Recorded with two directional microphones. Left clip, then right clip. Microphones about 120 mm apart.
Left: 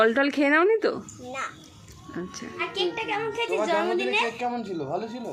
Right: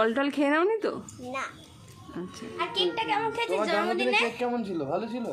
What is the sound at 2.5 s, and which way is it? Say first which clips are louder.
A woman's voice: even; 35° right (ahead or behind).